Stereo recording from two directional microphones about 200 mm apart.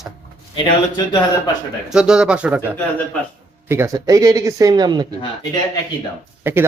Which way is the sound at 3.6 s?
15° right (ahead or behind).